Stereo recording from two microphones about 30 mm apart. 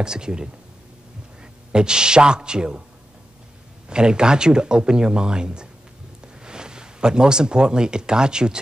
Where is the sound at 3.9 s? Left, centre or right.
Right.